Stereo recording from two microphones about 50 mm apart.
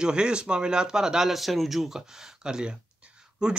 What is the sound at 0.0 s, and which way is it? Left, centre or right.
Speech, centre.